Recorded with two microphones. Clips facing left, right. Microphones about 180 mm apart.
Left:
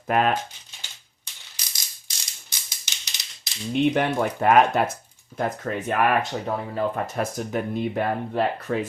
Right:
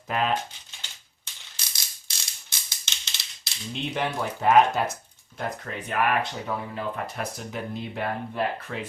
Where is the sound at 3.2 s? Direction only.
20° left (ahead or behind).